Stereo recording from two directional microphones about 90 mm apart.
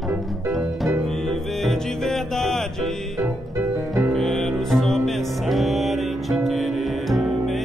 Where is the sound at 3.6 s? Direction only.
30° right (ahead or behind).